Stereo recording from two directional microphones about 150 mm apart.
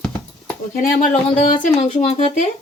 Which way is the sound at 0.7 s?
60° left (ahead or behind).